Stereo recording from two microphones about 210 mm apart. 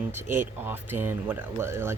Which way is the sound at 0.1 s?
10° right (ahead or behind).